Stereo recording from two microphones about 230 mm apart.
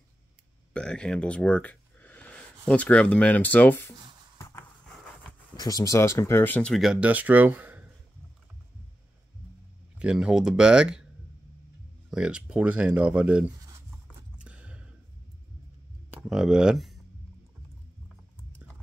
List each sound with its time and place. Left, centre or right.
0.7 s speech: centre
4.4 s a sound: centre
5.6 s speech: centre
9.9 s speech: centre
12.1 s speech: centre
14.4 s a sound: centre
16.1 s speech: centre